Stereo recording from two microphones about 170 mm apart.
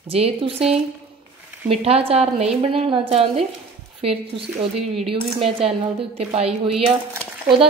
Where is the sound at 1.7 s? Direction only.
35° right (ahead or behind).